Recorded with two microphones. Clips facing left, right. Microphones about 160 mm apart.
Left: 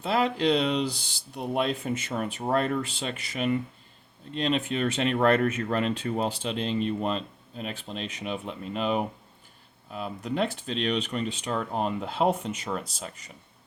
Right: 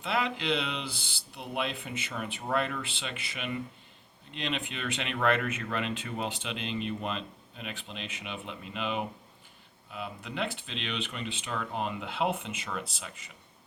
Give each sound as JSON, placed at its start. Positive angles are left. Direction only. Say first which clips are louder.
{"t": 0.0, "sound": "speech", "louder": "left 7 dB", "side_deg": 35}